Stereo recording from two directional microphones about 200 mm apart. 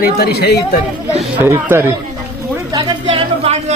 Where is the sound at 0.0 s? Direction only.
50° left (ahead or behind).